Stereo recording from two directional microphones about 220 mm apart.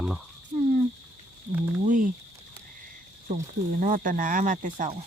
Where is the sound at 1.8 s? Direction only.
35° right (ahead or behind).